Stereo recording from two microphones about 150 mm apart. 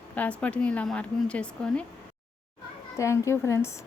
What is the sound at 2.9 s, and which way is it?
Speech, 20° left (ahead or behind).